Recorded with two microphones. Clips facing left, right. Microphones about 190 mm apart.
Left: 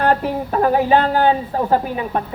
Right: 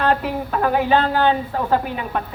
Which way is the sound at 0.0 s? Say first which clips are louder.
Left 2 dB; 35° left (ahead or behind).